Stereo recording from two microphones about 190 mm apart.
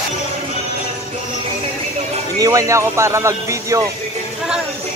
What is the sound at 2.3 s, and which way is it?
Speech, 20° right (ahead or behind).